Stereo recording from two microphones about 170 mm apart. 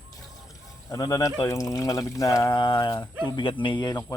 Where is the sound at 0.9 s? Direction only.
20° left (ahead or behind).